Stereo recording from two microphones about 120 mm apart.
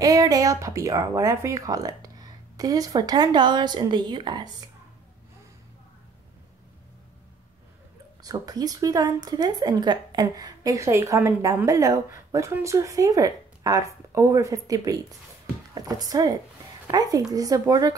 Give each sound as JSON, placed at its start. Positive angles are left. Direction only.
{"t": 0.0, "sound": "a woman's voice", "side_deg": -30}
{"t": 8.2, "sound": "a woman's voice", "side_deg": -30}